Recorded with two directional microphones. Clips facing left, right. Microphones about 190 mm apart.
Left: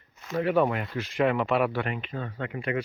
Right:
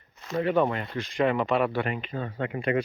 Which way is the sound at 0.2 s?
5° left (ahead or behind).